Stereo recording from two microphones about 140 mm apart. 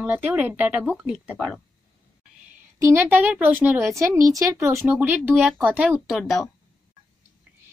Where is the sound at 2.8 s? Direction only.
15° right (ahead or behind).